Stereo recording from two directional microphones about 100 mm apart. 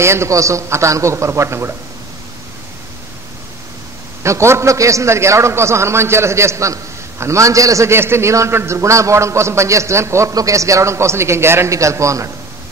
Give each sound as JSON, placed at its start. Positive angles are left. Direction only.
{"t": 0.0, "sound": "a man's voice", "side_deg": -25}
{"t": 4.2, "sound": "a man's voice", "side_deg": -30}